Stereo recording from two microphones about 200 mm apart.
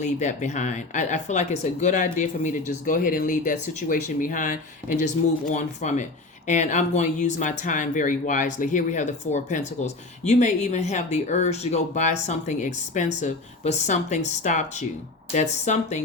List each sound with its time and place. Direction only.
0.0 s speech: 35° left (ahead or behind)